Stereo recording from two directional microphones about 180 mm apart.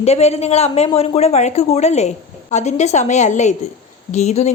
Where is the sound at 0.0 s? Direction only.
35° left (ahead or behind).